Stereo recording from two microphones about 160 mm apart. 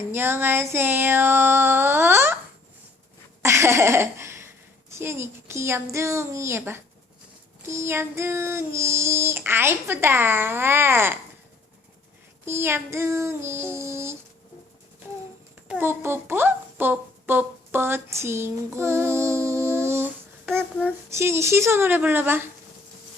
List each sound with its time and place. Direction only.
0.1 s female singing: 15° right (ahead or behind)
3.4 s speech: 15° right (ahead or behind)
7.6 s female singing: 15° right (ahead or behind)
12.5 s female singing: 15° right (ahead or behind)
15.6 s speech: 10° right (ahead or behind)
20.8 s female singing: 15° right (ahead or behind)